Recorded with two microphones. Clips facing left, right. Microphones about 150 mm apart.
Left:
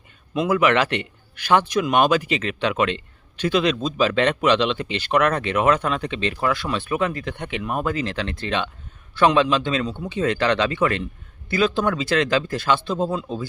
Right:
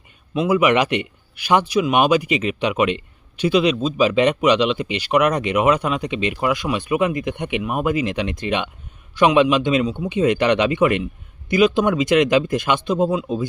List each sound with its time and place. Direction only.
0.3 s speech: 10° right (ahead or behind)